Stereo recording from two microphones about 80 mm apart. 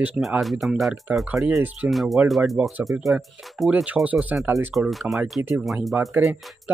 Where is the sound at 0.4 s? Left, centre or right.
Centre.